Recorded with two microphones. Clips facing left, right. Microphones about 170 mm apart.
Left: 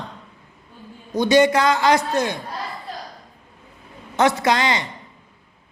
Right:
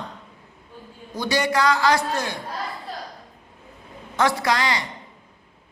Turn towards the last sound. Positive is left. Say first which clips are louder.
# left 3 dB
turn(degrees=20)  # may be behind; listen again after turning